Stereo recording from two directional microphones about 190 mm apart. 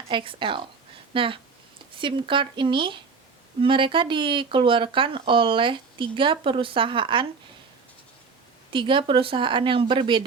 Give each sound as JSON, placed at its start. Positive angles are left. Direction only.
{"t": 0.1, "sound": "speech", "side_deg": -25}
{"t": 8.7, "sound": "speech", "side_deg": -25}